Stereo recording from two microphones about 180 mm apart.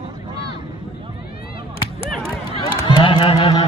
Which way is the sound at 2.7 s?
25° left (ahead or behind).